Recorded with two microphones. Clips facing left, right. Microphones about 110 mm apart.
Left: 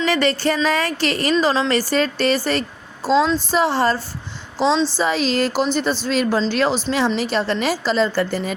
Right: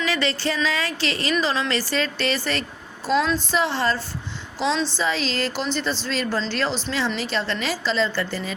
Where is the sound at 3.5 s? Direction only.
40° left (ahead or behind).